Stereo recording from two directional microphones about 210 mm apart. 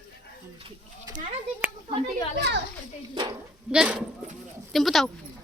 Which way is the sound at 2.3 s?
55° right (ahead or behind).